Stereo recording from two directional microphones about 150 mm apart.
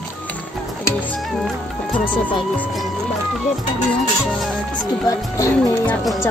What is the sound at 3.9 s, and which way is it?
Speech, centre (ahead or behind).